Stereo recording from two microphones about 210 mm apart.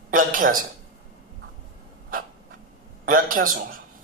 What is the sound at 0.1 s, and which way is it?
Speech, 40° right (ahead or behind).